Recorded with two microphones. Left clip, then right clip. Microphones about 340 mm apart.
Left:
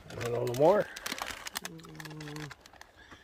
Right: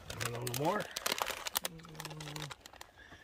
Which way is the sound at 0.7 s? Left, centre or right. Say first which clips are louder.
Left 8 dB; centre.